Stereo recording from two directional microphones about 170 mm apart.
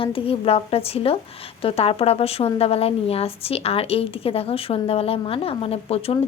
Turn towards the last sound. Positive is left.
turn(degrees=35)  # may be behind; listen again after turning